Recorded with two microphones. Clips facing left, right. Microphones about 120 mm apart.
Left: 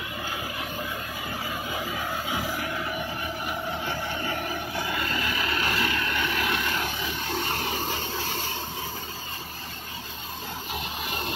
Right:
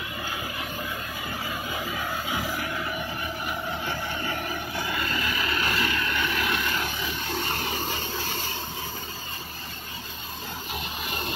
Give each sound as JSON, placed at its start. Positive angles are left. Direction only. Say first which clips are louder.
{"t": 4.7, "sound": "vehicle", "louder": "even", "side_deg": 25}